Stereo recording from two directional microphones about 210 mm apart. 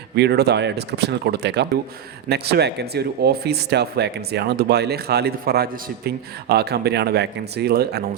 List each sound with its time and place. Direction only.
0.2 s speech: 50° right (ahead or behind)